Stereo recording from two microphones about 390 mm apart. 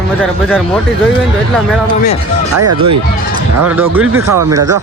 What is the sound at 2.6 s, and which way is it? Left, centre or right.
Speech, right.